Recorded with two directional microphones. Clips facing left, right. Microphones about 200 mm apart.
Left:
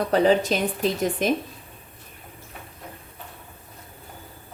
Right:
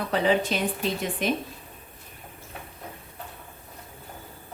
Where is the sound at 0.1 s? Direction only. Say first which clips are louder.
Left 4 dB; 40° left (ahead or behind).